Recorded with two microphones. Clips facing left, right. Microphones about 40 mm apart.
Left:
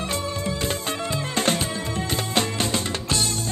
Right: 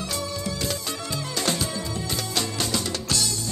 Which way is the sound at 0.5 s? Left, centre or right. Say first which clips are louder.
Left 3 dB; left.